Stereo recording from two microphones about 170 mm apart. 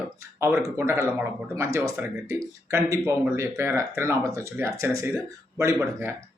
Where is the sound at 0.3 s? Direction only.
15° right (ahead or behind).